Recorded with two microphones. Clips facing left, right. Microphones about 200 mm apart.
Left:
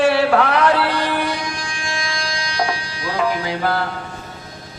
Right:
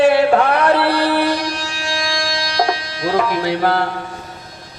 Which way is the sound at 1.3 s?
75° right (ahead or behind).